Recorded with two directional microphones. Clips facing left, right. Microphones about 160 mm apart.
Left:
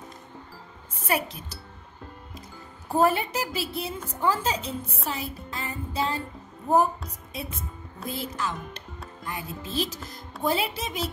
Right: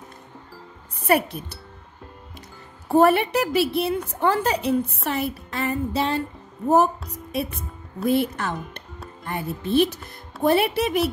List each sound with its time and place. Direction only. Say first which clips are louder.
1.0 s speech: right 7 dB; 60° right (ahead or behind)
2.9 s music: right 6 dB; 70° right (ahead or behind)
4.1 s speech: right 1 dB; 65° right (ahead or behind)
5.0 s music: right 7 dB; 65° right (ahead or behind)
7.1 s speech: right 9 dB; 65° right (ahead or behind)